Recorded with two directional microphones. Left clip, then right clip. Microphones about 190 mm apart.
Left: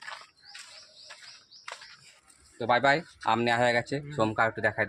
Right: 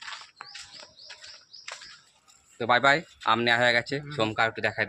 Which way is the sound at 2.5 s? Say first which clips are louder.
Right 2 dB; 5° right (ahead or behind).